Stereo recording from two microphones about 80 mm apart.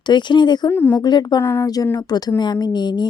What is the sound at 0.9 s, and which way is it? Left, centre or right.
Speech, left.